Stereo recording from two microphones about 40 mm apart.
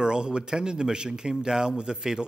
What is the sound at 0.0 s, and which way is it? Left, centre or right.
A man's voice, centre.